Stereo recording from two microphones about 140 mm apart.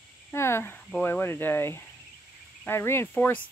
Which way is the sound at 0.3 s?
20° left (ahead or behind).